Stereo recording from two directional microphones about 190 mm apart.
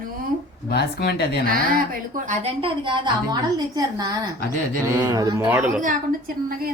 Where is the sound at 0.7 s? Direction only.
60° left (ahead or behind).